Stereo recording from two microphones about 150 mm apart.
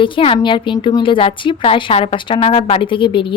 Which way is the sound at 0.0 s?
40° left (ahead or behind).